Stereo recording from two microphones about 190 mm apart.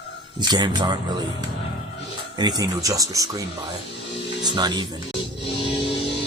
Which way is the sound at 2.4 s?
20° right (ahead or behind).